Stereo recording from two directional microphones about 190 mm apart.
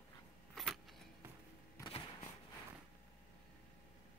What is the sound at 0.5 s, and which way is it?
Keys jangling, centre (ahead or behind).